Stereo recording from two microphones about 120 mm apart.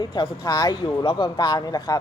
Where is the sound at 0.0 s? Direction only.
35° left (ahead or behind).